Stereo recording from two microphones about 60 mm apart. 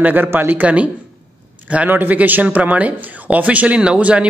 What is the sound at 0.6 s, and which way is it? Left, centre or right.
Speech, right.